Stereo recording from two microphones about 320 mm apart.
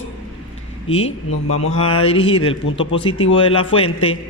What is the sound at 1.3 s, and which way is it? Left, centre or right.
Speech, left.